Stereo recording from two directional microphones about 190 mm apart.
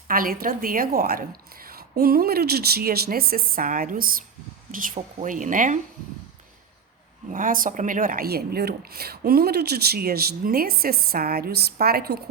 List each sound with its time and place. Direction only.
0.1 s speech: 50° right (ahead or behind)
7.3 s speech: 45° right (ahead or behind)